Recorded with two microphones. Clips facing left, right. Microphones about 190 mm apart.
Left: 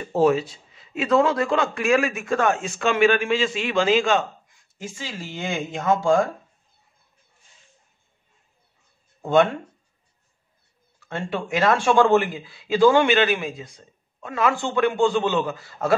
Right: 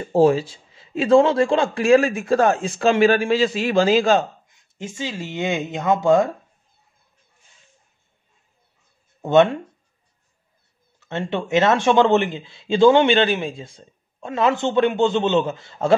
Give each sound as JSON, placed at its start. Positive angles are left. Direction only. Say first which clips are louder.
{"t": 0.0, "sound": "a man's voice", "louder": "right 3 dB", "side_deg": -30}
{"t": 4.5, "sound": "a man's voice", "louder": "right 3 dB", "side_deg": -20}
{"t": 9.2, "sound": "a man's voice", "louder": "right 3 dB", "side_deg": -20}
{"t": 11.0, "sound": "a man's voice", "louder": "right 3 dB", "side_deg": -25}